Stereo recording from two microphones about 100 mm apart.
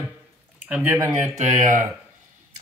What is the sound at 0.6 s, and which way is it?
Speech, 20° right (ahead or behind).